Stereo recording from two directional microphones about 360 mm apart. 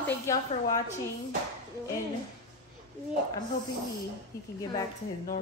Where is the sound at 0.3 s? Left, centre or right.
Centre.